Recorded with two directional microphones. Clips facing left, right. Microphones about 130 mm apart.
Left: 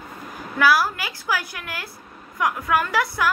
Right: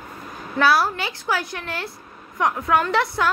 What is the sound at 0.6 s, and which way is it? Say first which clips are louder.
A woman's voice: right 1 dB; 25° right (ahead or behind).